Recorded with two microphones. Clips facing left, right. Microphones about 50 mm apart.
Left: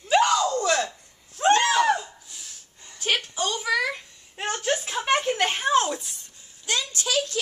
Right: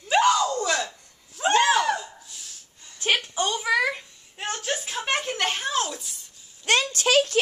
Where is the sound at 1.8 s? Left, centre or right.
Centre.